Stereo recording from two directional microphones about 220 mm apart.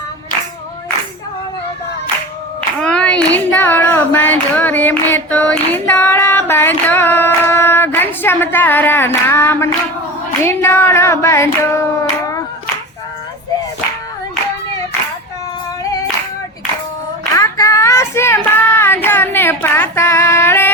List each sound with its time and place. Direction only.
2.6 s clapping: 5° left (ahead or behind)
10.4 s child singing: 10° left (ahead or behind)
12.2 s clapping: 15° left (ahead or behind)
15.8 s singing: 15° left (ahead or behind)
17.3 s child singing: 15° left (ahead or behind)